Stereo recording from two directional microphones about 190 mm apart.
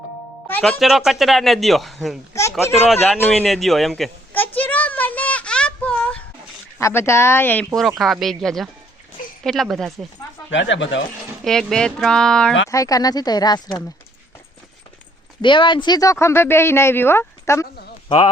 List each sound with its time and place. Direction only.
0.4 s speech: 10° left (ahead or behind)
2.3 s a sound: 15° left (ahead or behind)
3.2 s a sound: 5° left (ahead or behind)
6.7 s speech: 15° left (ahead or behind)
10.5 s speech: 75° left (ahead or behind)
11.4 s speech: 5° left (ahead or behind)
12.7 s speech: 20° left (ahead or behind)
15.4 s speech: 25° left (ahead or behind)